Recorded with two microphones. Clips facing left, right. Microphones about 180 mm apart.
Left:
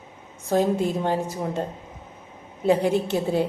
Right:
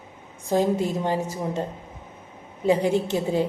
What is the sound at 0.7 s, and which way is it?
Speech, 10° left (ahead or behind).